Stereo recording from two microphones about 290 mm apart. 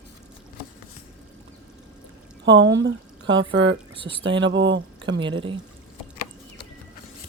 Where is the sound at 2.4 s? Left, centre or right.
Right.